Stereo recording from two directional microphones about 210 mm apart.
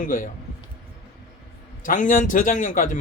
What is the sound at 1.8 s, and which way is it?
Speech, 40° left (ahead or behind).